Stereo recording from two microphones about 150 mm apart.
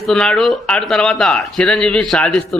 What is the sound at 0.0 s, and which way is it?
A man's voice, 5° left (ahead or behind).